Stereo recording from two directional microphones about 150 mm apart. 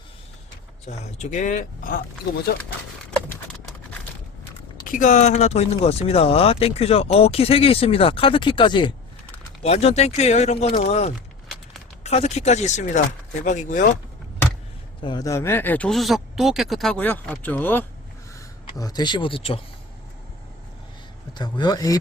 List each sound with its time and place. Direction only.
0.9 s speech: 50° left (ahead or behind)
4.9 s speech: 60° left (ahead or behind); by 8.9 s 30° left (ahead or behind)
9.6 s speech: 45° left (ahead or behind)
15.0 s speech: 25° left (ahead or behind)
18.3 s speech: 25° left (ahead or behind)
21.3 s speech: 30° left (ahead or behind)